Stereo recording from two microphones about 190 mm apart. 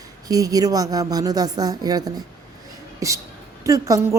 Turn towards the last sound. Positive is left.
turn(degrees=-15)  # may be behind; listen again after turning